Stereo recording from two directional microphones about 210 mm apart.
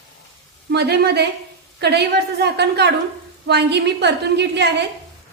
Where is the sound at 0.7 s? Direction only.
50° right (ahead or behind).